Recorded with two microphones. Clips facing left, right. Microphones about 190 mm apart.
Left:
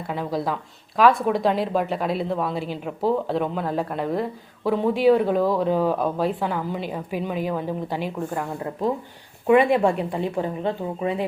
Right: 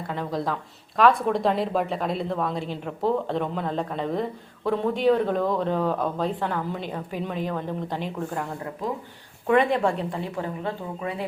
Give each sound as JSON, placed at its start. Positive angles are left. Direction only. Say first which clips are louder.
{"t": 0.1, "sound": "a woman's voice", "louder": "left 2 dB", "side_deg": 10}
{"t": 9.5, "sound": "a woman's voice", "louder": "left 4 dB", "side_deg": 10}